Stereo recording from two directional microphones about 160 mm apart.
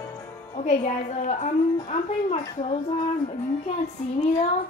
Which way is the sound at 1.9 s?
40° left (ahead or behind).